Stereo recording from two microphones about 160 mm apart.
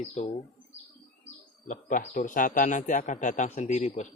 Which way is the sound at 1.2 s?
55° left (ahead or behind).